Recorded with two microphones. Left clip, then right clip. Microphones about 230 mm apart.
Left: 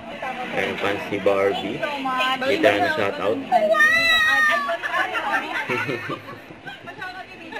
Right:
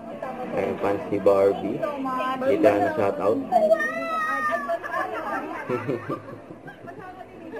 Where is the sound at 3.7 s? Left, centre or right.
Left.